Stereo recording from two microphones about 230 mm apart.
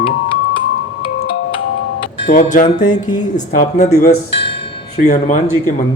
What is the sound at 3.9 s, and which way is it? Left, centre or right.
Speech, left.